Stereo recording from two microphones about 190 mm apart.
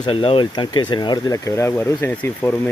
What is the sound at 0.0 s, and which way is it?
Speech, 30° left (ahead or behind).